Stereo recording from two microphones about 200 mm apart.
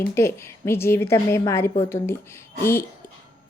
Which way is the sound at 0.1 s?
15° left (ahead or behind).